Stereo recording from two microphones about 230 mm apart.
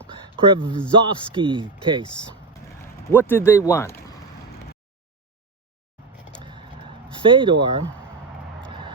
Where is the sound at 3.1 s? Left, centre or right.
Centre.